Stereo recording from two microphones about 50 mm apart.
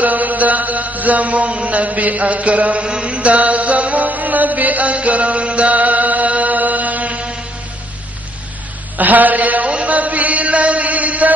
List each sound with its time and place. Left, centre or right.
0.0 s mantra: right
8.9 s chant: right